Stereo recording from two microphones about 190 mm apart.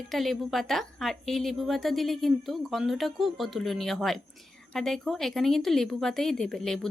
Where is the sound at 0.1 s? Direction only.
Centre (ahead or behind).